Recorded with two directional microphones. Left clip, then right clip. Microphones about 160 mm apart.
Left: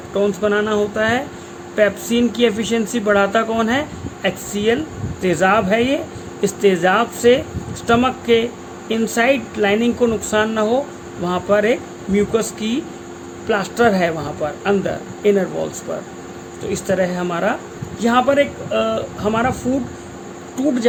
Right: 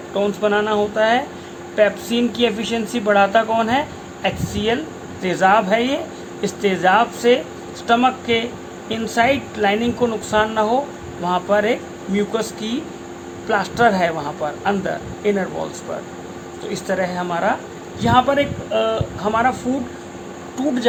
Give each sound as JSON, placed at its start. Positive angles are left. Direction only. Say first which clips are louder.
{"t": 0.2, "sound": "speech", "louder": "left 1 dB", "side_deg": 55}
{"t": 16.7, "sound": "speech", "louder": "left 2 dB", "side_deg": 65}